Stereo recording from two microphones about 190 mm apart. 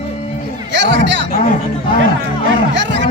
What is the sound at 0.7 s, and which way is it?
Speech, 70° right (ahead or behind).